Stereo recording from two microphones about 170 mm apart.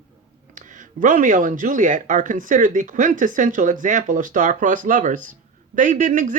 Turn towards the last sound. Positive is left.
turn(degrees=-50)  # may be behind; listen again after turning